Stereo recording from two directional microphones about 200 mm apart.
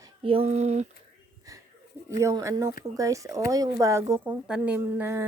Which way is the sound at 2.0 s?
15° right (ahead or behind).